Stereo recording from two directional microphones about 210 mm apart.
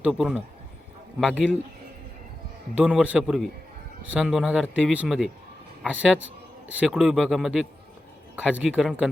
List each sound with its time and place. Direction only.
0.0 s a man's voice: 5° right (ahead or behind)
2.7 s a man's voice: 5° right (ahead or behind)
6.1 s a sound: 65° right (ahead or behind)
6.7 s a man's voice: 5° right (ahead or behind)